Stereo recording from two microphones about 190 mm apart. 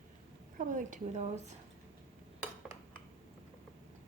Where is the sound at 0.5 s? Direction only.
45° right (ahead or behind).